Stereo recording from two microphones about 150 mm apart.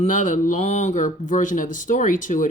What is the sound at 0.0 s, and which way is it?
Speech, 60° left (ahead or behind).